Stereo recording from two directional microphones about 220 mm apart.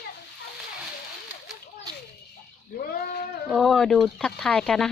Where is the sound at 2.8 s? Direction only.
40° left (ahead or behind).